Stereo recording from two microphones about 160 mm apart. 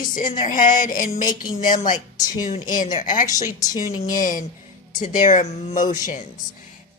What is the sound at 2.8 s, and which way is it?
Speech, 50° left (ahead or behind).